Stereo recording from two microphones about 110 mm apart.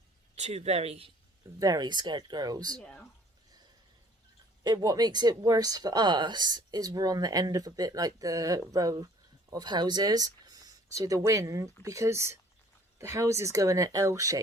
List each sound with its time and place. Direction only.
0.3 s speech: 80° right; by 1.1 s 65° right (ahead or behind)
1.5 s speech: 35° right (ahead or behind)
4.6 s speech: 35° right (ahead or behind)